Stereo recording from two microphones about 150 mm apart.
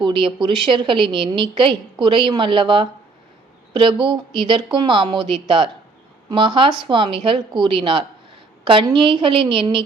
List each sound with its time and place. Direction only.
0.0 s a woman's voice: 35° right (ahead or behind)